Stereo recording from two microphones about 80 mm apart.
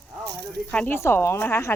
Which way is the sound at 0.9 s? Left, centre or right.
Left.